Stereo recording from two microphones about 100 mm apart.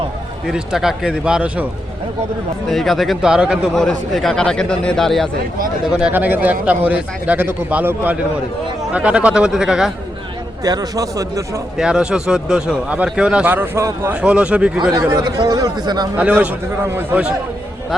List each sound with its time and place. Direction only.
0.4 s speech: 5° right (ahead or behind)
2.6 s a man's voice: centre (ahead or behind)
3.8 s a man's voice: 5° left (ahead or behind)
5.8 s speech: 10° right (ahead or behind)
10.6 s speech: 40° right (ahead or behind)
11.8 s speech: 10° right (ahead or behind)
13.7 s speech: 30° right (ahead or behind)
14.1 s speech: 10° right (ahead or behind)
15.1 s speech: 40° right (ahead or behind)
16.1 s speech: 15° right (ahead or behind)